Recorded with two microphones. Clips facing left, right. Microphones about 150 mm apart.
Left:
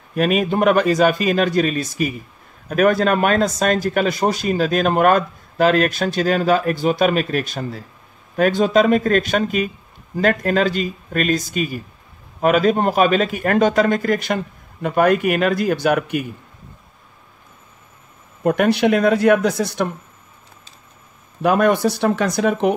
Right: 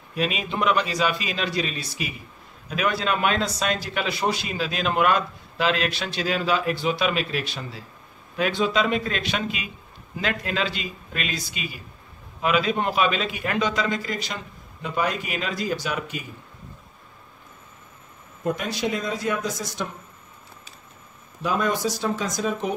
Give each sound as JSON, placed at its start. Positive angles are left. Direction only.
{"t": 0.1, "sound": "a man's voice", "side_deg": 50}
{"t": 18.4, "sound": "a man's voice", "side_deg": 65}
{"t": 21.4, "sound": "a man's voice", "side_deg": 60}